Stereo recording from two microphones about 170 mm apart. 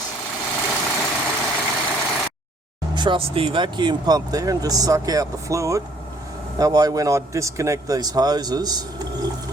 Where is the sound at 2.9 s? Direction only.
30° right (ahead or behind).